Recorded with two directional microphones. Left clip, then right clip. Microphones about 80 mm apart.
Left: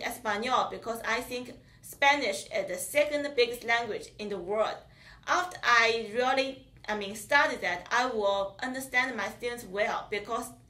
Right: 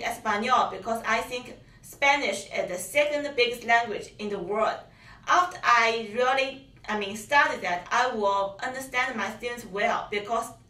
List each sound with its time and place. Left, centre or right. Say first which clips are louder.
0.0 s a woman's voice: right 4 dB; right